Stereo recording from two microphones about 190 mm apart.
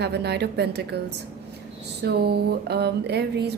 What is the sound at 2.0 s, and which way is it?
A woman's voice, 55° right (ahead or behind).